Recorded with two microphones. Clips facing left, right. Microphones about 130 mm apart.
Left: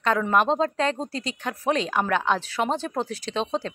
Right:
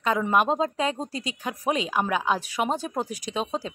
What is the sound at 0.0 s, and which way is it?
Speech, 10° right (ahead or behind).